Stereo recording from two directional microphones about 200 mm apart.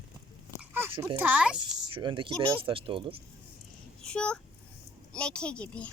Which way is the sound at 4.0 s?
5° left (ahead or behind).